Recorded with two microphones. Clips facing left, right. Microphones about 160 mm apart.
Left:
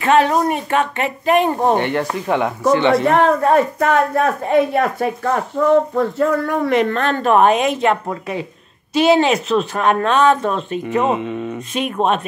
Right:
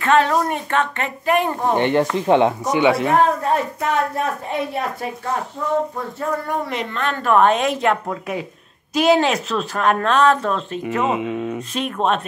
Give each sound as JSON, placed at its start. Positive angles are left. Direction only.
{"t": 0.0, "sound": "speech", "side_deg": 15}
{"t": 1.8, "sound": "speech", "side_deg": -20}
{"t": 2.8, "sound": "speech", "side_deg": -5}
{"t": 3.3, "sound": "a woman's voice", "side_deg": 70}
{"t": 5.9, "sound": "speech", "side_deg": 90}
{"t": 7.2, "sound": "speech", "side_deg": 20}
{"t": 7.4, "sound": "speech", "side_deg": 5}